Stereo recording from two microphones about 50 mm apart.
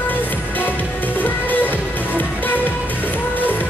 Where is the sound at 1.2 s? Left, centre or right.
Left.